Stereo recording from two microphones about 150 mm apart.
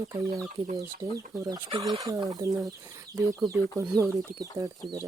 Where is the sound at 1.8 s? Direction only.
25° right (ahead or behind).